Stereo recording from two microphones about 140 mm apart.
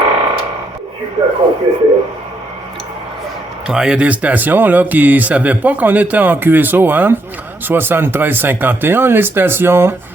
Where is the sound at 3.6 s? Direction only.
5° right (ahead or behind).